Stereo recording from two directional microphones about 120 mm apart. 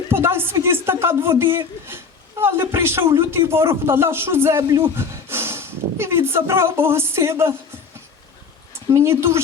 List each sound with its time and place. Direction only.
0.1 s a man's voice: 20° right (ahead or behind)
8.9 s a man's voice: 25° right (ahead or behind)